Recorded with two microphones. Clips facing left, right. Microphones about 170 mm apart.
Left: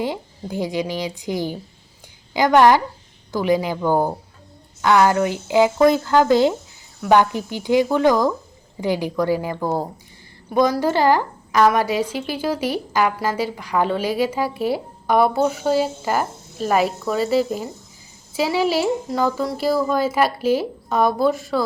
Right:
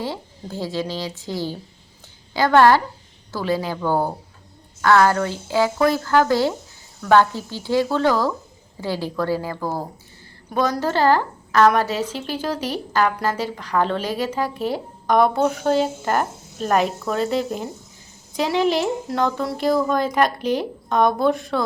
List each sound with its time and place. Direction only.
0.0 s a woman's voice: 15° left (ahead or behind)